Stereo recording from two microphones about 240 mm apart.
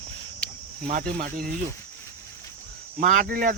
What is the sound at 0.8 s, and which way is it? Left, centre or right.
Speech, right.